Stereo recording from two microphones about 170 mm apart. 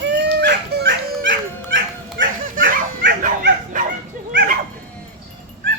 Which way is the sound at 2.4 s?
55° right (ahead or behind).